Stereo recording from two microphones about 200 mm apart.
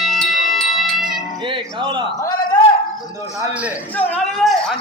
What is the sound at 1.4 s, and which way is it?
Speech, 25° right (ahead or behind).